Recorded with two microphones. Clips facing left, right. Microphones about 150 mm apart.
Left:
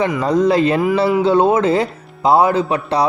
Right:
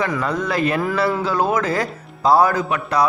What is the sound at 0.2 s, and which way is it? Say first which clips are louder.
A man's voice: left 7 dB; 30° left (ahead or behind).